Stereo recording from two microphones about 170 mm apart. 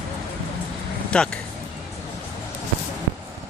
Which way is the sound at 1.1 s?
5° left (ahead or behind).